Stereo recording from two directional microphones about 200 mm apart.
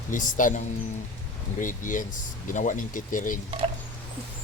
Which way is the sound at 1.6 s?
40° left (ahead or behind).